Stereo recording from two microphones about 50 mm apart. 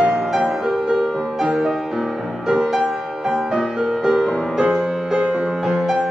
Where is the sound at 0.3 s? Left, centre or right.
Centre.